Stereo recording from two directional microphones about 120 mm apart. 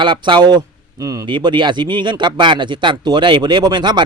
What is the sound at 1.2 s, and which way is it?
A man's voice, 40° right (ahead or behind).